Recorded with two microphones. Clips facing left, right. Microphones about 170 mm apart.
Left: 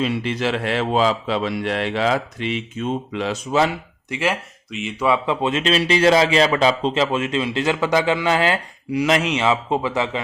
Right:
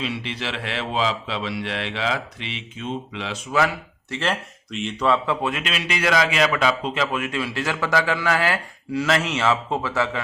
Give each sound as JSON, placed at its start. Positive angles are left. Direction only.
{"t": 0.0, "sound": "a man's voice", "side_deg": 45}
{"t": 4.1, "sound": "speech", "side_deg": 10}